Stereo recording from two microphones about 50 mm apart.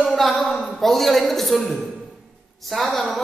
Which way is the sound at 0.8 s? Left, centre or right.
Centre.